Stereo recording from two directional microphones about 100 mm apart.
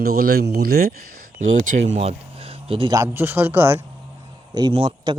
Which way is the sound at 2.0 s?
85° right.